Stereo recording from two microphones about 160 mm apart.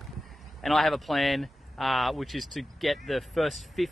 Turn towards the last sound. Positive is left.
turn(degrees=0)  # may be behind; listen again after turning